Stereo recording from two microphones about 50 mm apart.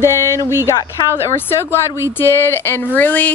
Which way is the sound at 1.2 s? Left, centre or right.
Left.